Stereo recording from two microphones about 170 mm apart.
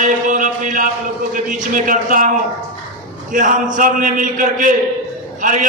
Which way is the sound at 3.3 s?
50° right (ahead or behind).